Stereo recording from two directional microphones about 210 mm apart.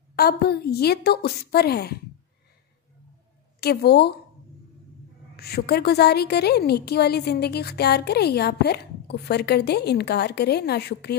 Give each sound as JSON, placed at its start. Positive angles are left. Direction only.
{"t": 0.1, "sound": "a woman's voice", "side_deg": 50}
{"t": 3.6, "sound": "a woman's voice", "side_deg": 50}
{"t": 5.3, "sound": "a woman's voice", "side_deg": 50}